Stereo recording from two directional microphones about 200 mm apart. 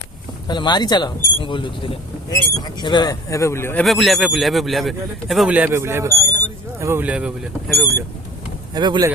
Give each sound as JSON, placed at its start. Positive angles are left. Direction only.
{"t": 0.4, "sound": "speech", "side_deg": 20}
{"t": 3.8, "sound": "a man's voice", "side_deg": 0}
{"t": 8.7, "sound": "speech", "side_deg": -20}